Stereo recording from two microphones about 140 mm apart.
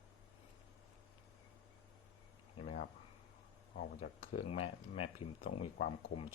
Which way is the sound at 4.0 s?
45° left (ahead or behind).